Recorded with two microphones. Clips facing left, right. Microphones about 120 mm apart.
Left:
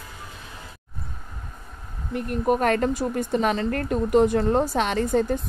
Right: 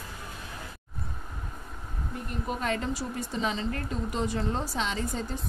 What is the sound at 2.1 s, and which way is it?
Speech, 60° left (ahead or behind).